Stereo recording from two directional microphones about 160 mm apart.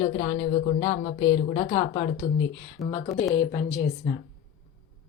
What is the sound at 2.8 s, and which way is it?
A woman's voice, 20° left (ahead or behind).